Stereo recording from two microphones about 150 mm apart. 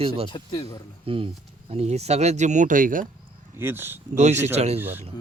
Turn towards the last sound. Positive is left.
turn(degrees=-45)  # may be behind; listen again after turning